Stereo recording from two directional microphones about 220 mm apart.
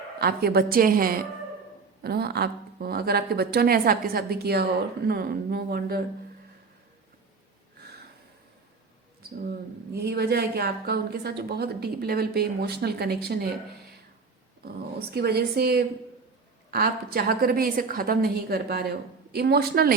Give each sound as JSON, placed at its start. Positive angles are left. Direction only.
{"t": 0.2, "sound": "a woman's voice", "side_deg": -45}
{"t": 9.5, "sound": "a woman's voice", "side_deg": -45}
{"t": 14.6, "sound": "a woman's voice", "side_deg": -45}